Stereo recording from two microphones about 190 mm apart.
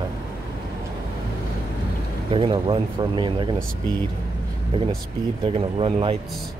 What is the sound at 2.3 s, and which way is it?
Speech, 30° right (ahead or behind).